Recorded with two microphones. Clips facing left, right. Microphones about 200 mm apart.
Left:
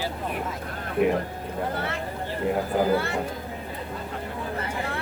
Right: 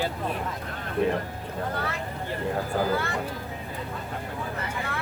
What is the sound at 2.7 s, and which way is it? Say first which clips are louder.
Speech: left 3 dB; 15° left (ahead or behind).